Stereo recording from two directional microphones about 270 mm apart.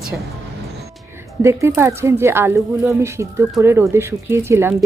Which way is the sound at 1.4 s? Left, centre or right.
Centre.